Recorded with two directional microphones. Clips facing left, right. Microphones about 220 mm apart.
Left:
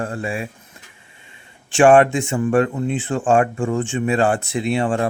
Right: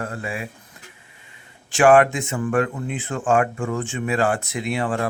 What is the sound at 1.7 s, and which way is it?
Speech, 30° left (ahead or behind).